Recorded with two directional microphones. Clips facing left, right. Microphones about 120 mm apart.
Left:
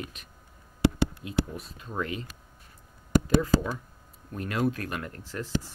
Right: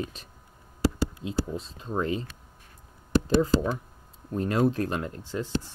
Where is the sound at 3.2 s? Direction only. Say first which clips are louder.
Right 3 dB; 25° right (ahead or behind).